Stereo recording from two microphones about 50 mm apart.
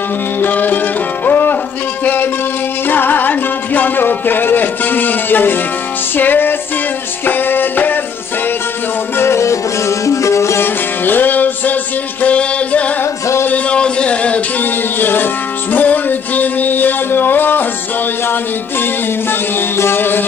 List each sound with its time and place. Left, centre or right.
0.4 s music: left
2.9 s music: left
9.2 s music: left
10.6 s music: left
14.6 s music: left
19.8 s music: left